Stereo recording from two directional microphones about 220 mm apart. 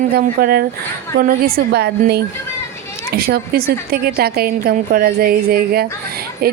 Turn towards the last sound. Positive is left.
turn(degrees=-45)  # may be behind; listen again after turning